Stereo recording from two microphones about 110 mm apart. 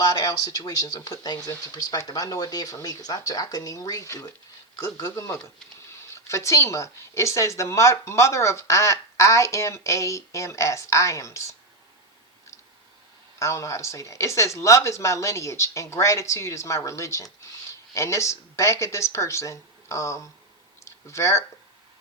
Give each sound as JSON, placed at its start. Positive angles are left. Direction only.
{"t": 0.0, "sound": "speech", "side_deg": 35}
{"t": 13.4, "sound": "speech", "side_deg": 25}
{"t": 20.8, "sound": "a sound", "side_deg": 25}